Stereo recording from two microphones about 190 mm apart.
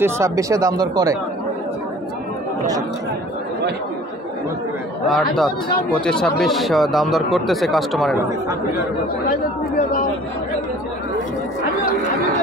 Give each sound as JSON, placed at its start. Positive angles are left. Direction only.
{"t": 0.0, "sound": "speech", "side_deg": -15}
{"t": 5.1, "sound": "a man's voice", "side_deg": 0}